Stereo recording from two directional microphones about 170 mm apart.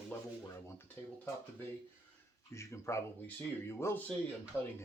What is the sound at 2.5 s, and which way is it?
Speech, 15° left (ahead or behind).